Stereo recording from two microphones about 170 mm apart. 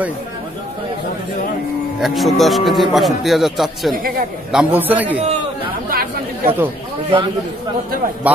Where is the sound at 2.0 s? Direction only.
Centre (ahead or behind).